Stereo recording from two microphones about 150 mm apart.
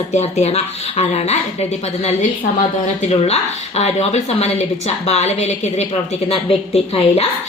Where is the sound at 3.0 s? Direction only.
45° left (ahead or behind).